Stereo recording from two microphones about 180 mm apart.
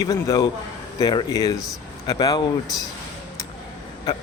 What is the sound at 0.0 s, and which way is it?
Speech, 20° left (ahead or behind).